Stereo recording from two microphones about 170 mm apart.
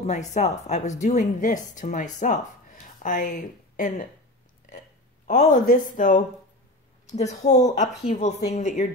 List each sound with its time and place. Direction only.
0.0 s a woman's voice: 45° left (ahead or behind)